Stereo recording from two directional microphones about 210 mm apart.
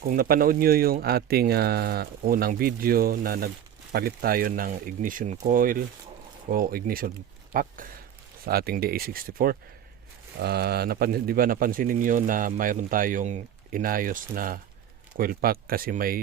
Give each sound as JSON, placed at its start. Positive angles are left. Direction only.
{"t": 0.1, "sound": "speech", "side_deg": -45}